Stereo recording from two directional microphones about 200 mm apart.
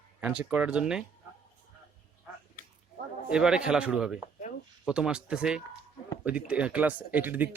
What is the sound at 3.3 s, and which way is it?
Speech, 5° right (ahead or behind).